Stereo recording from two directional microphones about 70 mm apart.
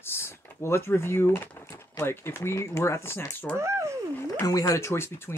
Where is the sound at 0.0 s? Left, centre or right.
Left.